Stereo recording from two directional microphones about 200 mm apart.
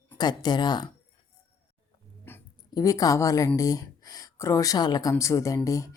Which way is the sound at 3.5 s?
15° left (ahead or behind).